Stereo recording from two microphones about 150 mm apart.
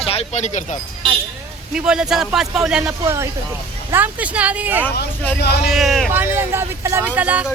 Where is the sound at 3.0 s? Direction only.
20° right (ahead or behind); by 6.1 s centre (ahead or behind).